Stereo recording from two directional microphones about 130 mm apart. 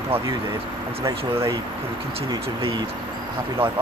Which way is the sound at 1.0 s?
20° right (ahead or behind).